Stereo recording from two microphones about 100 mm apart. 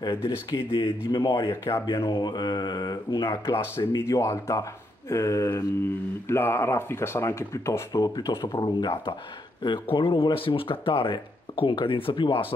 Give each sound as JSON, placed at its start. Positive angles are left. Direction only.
{"t": 0.0, "sound": "speech", "side_deg": 55}
{"t": 4.1, "sound": "speech", "side_deg": 30}
{"t": 7.9, "sound": "speech", "side_deg": 40}
{"t": 8.5, "sound": "speech", "side_deg": 50}